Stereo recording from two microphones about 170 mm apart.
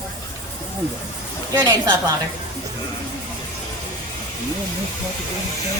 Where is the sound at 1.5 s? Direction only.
20° right (ahead or behind).